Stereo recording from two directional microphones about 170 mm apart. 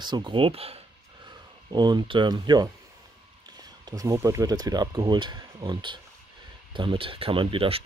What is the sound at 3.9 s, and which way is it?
Speech, 20° right (ahead or behind).